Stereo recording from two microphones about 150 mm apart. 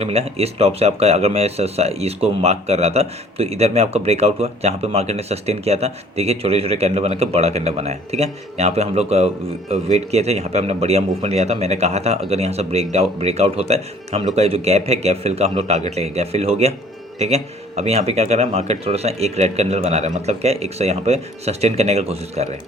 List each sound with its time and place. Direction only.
0.0 s speech: 45° right (ahead or behind)